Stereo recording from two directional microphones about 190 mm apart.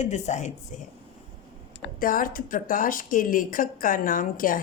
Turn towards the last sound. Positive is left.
turn(degrees=45)  # may be behind; listen again after turning